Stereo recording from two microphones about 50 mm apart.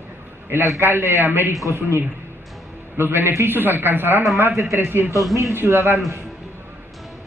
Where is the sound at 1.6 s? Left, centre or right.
Left.